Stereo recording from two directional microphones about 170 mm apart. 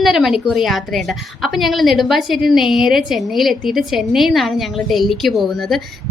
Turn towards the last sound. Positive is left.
turn(degrees=0)  # may be behind; listen again after turning